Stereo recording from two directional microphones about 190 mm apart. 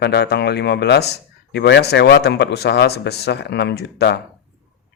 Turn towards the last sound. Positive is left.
turn(degrees=60)  # may be behind; listen again after turning